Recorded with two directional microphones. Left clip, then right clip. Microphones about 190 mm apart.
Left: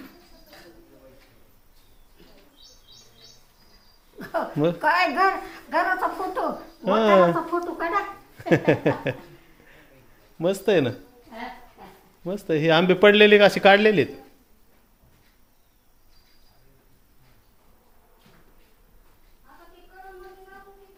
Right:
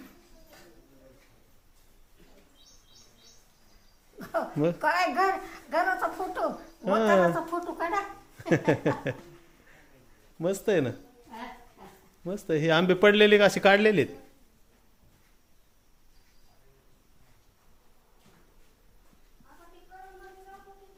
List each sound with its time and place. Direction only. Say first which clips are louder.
4.2 s a sound: left 3 dB; 15° right (ahead or behind)
4.5 s a man's voice: left 5 dB; centre (ahead or behind)
4.8 s speech: left 6 dB; 20° right (ahead or behind)
6.8 s a man's voice: left 5 dB; centre (ahead or behind)
10.3 s a man's voice: left 5 dB; centre (ahead or behind)
12.2 s a man's voice: left 5 dB; 5° right (ahead or behind)